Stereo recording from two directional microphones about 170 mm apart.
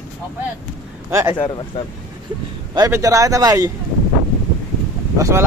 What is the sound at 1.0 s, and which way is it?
Speech, 15° right (ahead or behind).